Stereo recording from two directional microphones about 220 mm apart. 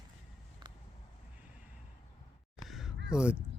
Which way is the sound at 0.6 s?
20° right (ahead or behind).